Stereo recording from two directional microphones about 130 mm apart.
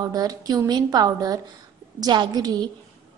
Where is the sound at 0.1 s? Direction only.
30° right (ahead or behind).